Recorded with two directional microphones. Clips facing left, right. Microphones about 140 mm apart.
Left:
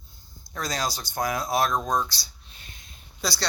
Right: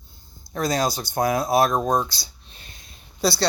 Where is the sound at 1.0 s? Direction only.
30° right (ahead or behind).